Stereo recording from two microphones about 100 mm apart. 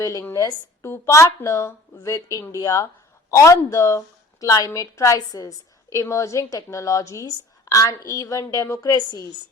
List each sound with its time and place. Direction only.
0.0 s a woman's voice: 35° left (ahead or behind)